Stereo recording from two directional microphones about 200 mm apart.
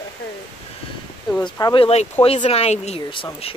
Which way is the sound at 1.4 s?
25° left (ahead or behind).